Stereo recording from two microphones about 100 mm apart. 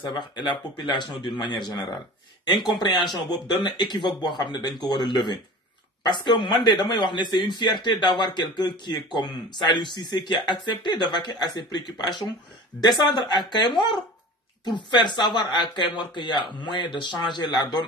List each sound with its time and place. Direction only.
0.1 s speech: 45° left (ahead or behind)